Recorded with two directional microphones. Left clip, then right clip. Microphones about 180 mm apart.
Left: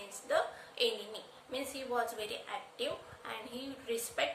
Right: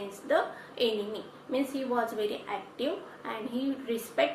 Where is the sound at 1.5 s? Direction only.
40° left (ahead or behind).